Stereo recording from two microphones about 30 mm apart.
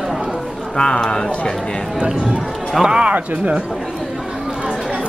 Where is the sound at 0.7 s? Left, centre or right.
Left.